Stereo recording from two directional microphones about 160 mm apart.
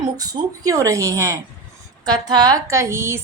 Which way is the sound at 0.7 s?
20° right (ahead or behind).